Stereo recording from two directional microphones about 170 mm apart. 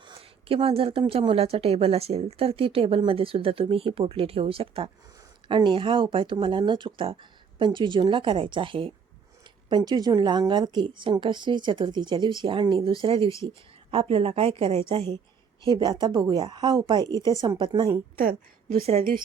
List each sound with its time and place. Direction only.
0.0 s a woman's voice: 30° right (ahead or behind)